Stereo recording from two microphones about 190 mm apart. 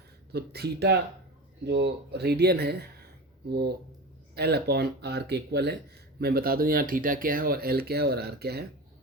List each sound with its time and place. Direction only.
0.3 s speech: 60° right (ahead or behind)
4.4 s speech: 60° right (ahead or behind)